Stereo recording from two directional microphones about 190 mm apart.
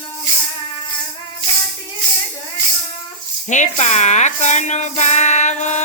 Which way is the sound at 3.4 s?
40° left (ahead or behind).